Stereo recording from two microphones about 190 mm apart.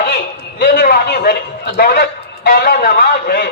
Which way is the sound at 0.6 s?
55° left (ahead or behind).